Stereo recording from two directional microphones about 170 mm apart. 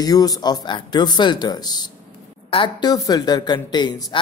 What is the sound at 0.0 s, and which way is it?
Speech, 20° left (ahead or behind).